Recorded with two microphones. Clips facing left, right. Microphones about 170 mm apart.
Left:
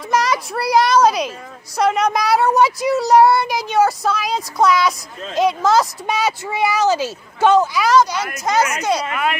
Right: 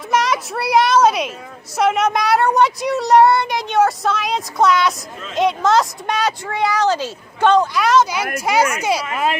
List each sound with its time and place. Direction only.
0.1 s a child's voice: centre (ahead or behind)
9.0 s speech: 30° right (ahead or behind)